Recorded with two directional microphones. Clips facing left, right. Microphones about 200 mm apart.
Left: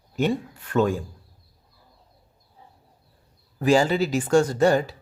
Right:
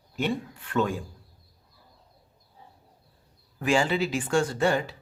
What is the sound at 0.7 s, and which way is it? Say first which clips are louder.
Speech: left 5 dB; 45° left (ahead or behind).